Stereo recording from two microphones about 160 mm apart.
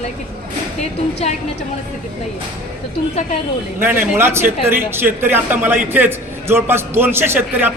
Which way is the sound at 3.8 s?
15° right (ahead or behind).